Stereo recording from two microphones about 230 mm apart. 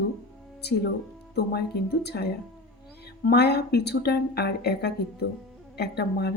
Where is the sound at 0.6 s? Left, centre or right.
Left.